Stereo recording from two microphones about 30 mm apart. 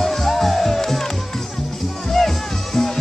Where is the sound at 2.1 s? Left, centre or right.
Centre.